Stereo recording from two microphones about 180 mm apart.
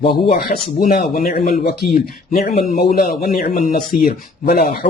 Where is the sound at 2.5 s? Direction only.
40° left (ahead or behind).